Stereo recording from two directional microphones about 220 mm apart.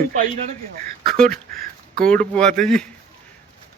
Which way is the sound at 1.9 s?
5° left (ahead or behind).